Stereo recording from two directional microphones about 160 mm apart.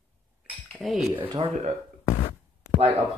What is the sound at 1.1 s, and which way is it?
Speech, 35° right (ahead or behind).